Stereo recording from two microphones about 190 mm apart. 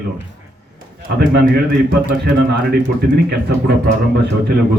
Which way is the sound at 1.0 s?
55° right (ahead or behind).